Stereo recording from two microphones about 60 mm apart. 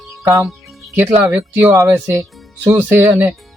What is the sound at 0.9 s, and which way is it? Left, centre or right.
Speech, right.